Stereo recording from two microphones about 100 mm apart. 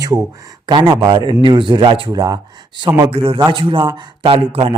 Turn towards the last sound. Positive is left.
turn(degrees=-60)  # may be behind; listen again after turning